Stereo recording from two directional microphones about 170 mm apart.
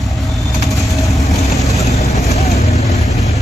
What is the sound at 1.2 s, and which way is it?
Vehicle, 20° left (ahead or behind).